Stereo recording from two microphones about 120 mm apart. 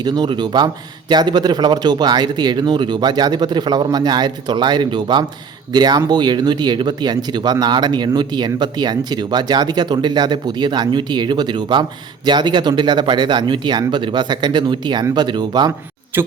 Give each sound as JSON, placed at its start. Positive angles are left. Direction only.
{"t": 0.0, "sound": "speech", "side_deg": -40}
{"t": 16.1, "sound": "speech", "side_deg": -20}